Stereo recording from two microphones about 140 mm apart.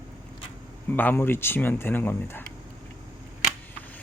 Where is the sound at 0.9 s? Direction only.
15° left (ahead or behind).